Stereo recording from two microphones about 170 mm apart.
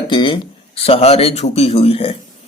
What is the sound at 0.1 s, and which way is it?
A man's voice, 30° left (ahead or behind).